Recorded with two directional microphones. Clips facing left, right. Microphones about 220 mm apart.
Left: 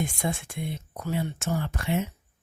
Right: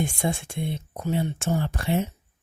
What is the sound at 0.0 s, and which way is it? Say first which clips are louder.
Speech: right 3 dB; 30° right (ahead or behind).